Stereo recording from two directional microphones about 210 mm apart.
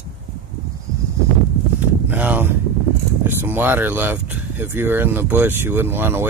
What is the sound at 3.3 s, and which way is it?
Speech, 10° right (ahead or behind).